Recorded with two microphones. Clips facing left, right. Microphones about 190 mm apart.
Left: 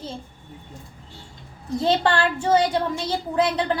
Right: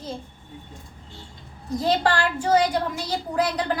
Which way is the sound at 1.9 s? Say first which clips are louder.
Left 1 dB; 25° left (ahead or behind).